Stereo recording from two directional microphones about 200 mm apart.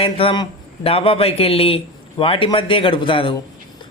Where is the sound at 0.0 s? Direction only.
25° left (ahead or behind).